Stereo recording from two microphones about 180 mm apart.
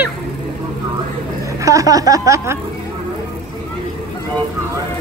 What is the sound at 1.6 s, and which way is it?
Speech, 20° right (ahead or behind).